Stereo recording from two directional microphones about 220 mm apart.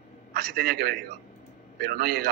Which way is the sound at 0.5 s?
45° right (ahead or behind).